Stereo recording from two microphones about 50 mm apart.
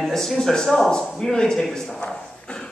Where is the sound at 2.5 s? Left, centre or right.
Centre.